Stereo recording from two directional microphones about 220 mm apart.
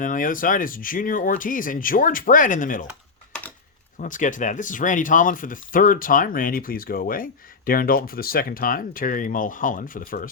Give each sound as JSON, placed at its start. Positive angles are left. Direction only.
{"t": 0.0, "sound": "speech", "side_deg": 35}
{"t": 4.0, "sound": "speech", "side_deg": 35}